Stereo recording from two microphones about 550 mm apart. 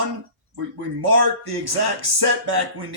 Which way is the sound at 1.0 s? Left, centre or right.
Right.